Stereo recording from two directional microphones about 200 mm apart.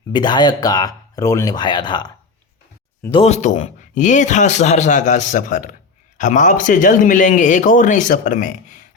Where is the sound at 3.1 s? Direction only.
30° left (ahead or behind).